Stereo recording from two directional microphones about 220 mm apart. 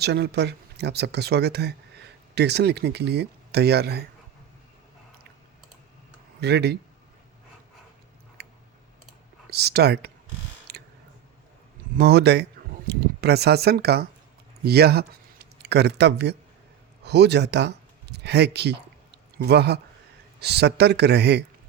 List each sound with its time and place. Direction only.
0.0 s speech: 50° right (ahead or behind)
6.4 s speech: 50° right (ahead or behind)
9.5 s speech: 45° right (ahead or behind)
10.7 s a sound: 45° right (ahead or behind)
11.9 s speech: 45° right (ahead or behind)